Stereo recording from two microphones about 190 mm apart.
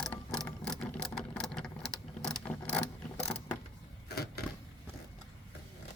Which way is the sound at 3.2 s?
10° left (ahead or behind).